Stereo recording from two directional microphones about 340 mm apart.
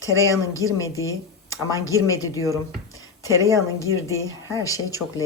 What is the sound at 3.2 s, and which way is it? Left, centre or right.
Speech, centre.